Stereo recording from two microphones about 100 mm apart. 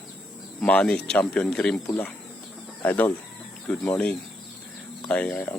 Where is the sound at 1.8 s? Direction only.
15° left (ahead or behind).